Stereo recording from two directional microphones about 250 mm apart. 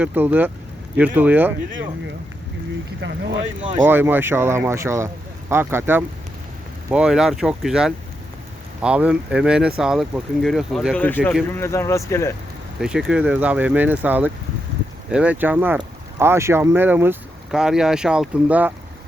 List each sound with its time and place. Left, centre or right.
0.0 s speech: centre
3.0 s speech: right
3.8 s speech: centre
12.8 s speech: centre